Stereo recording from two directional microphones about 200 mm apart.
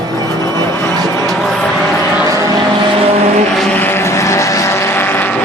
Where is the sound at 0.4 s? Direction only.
15° left (ahead or behind).